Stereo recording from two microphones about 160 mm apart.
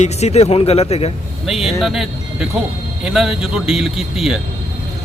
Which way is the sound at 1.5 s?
Centre (ahead or behind).